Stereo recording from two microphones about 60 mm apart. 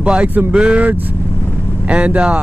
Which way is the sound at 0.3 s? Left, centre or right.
Right.